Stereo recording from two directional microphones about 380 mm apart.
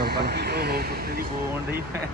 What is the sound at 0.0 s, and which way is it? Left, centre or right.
Speech, right.